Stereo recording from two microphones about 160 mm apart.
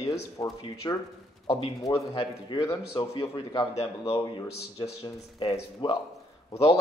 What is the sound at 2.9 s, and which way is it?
Speech, 30° left (ahead or behind).